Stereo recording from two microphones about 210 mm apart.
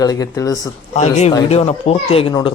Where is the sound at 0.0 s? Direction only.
15° left (ahead or behind).